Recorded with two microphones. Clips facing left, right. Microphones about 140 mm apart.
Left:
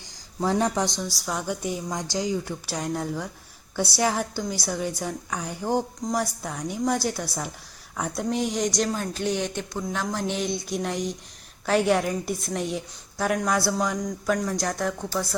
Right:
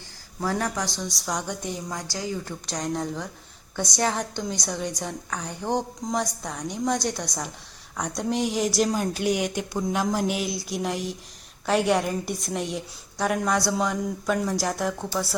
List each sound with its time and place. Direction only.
0.3 s speech: 20° left (ahead or behind)
1.0 s a woman's voice: centre (ahead or behind)
1.9 s a woman's voice: 20° left (ahead or behind); by 15.4 s centre (ahead or behind)